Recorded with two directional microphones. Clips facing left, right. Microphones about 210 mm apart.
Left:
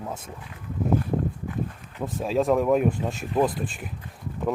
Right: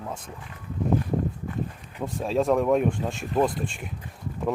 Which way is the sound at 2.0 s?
Centre (ahead or behind).